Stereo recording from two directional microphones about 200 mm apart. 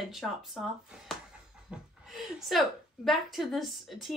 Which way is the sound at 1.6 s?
Centre (ahead or behind).